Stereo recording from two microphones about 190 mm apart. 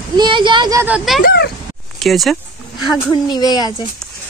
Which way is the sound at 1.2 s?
55° left (ahead or behind).